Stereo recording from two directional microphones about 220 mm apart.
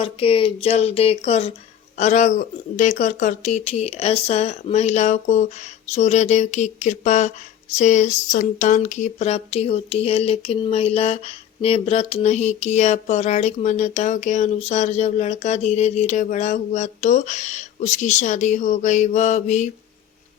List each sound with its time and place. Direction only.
0.0 s speech: 25° left (ahead or behind)